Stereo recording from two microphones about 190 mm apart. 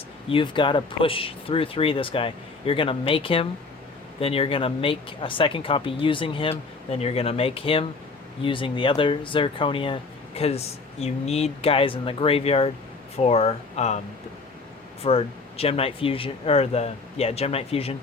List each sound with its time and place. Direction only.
0.3 s speech: 25° left (ahead or behind)
15.0 s speech: 30° left (ahead or behind)